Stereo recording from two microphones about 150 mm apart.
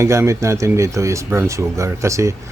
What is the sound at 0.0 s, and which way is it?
Speech, 20° right (ahead or behind).